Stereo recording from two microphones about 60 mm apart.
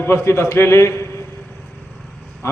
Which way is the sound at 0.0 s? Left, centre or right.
Left.